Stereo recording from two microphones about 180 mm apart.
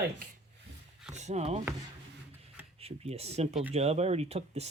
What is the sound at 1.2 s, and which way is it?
Speech, 40° right (ahead or behind).